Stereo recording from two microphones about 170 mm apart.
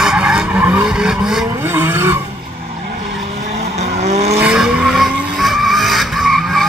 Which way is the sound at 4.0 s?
40° right (ahead or behind).